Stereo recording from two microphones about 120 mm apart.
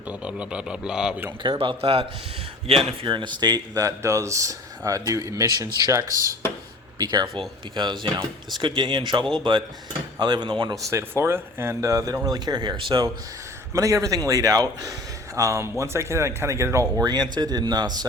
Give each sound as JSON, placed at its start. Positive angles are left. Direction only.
{"t": 0.1, "sound": "speech", "side_deg": -10}
{"t": 1.4, "sound": "speech", "side_deg": -45}
{"t": 10.8, "sound": "speech", "side_deg": -25}
{"t": 13.7, "sound": "speech", "side_deg": -25}